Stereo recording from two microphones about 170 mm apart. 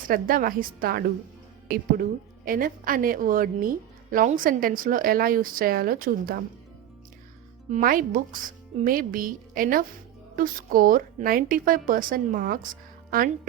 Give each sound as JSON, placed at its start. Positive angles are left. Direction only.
{"t": 0.1, "sound": "a woman's voice", "side_deg": -55}
{"t": 7.7, "sound": "a woman's voice", "side_deg": -55}